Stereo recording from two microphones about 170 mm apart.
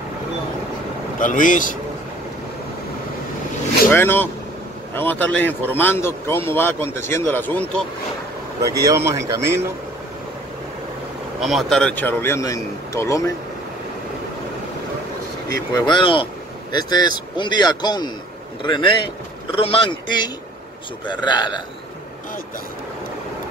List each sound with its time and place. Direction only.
1.2 s speech: 50° left (ahead or behind)
3.9 s speech: 15° left (ahead or behind)
8.6 s speech: 20° right (ahead or behind)
11.4 s speech: centre (ahead or behind); by 13.3 s 20° left (ahead or behind)
15.7 s a man's voice: 25° left (ahead or behind)